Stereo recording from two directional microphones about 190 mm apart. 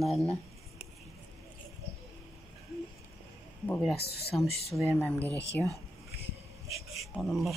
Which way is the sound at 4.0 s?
55° left (ahead or behind).